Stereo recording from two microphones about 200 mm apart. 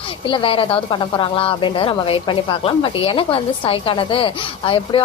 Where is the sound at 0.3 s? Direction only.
25° left (ahead or behind).